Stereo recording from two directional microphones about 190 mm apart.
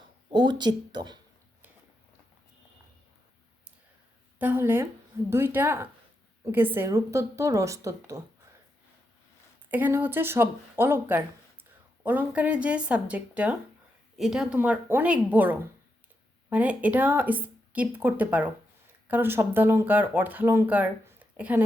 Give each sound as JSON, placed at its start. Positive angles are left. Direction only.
{"t": 0.3, "sound": "speech", "side_deg": -25}
{"t": 4.4, "sound": "speech", "side_deg": -10}
{"t": 9.6, "sound": "speech", "side_deg": -10}